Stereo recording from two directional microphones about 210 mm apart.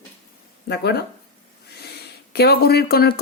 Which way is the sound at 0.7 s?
50° left (ahead or behind).